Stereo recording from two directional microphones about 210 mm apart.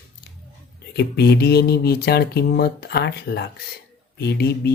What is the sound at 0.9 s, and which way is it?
Speech, 55° left (ahead or behind).